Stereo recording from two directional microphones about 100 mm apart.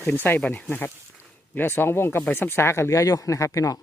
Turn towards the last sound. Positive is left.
turn(degrees=35)  # may be behind; listen again after turning